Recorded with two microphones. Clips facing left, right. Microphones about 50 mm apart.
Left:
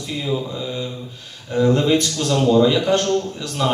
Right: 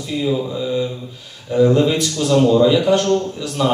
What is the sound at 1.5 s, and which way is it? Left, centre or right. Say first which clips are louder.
Speech: right 2 dB; centre.